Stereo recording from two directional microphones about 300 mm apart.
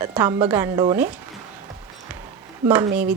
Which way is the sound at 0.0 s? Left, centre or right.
Centre.